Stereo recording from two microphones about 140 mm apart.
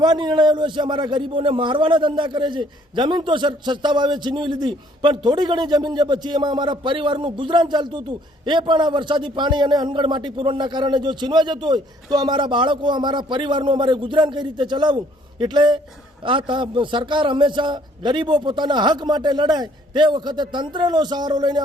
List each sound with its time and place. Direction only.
0.0 s a man's voice: 30° right (ahead or behind)